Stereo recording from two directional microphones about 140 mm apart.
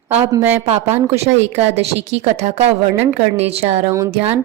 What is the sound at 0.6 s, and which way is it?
Speech, 50° right (ahead or behind).